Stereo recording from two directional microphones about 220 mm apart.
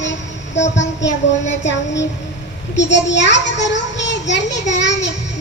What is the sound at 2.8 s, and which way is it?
A child's voice, 55° left (ahead or behind).